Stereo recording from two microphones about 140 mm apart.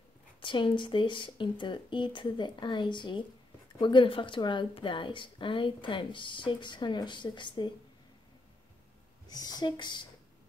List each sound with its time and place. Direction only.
0.4 s a woman's voice: 35° left (ahead or behind)
9.3 s a woman's voice: 30° left (ahead or behind)